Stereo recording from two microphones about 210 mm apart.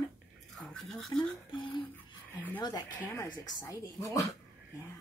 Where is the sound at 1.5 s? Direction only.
25° left (ahead or behind).